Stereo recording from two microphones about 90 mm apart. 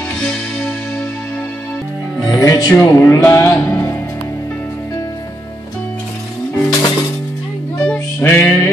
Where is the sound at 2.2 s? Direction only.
35° left (ahead or behind).